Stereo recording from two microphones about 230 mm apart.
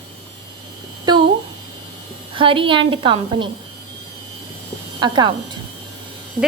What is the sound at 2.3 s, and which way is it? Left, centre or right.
A woman's voice, right.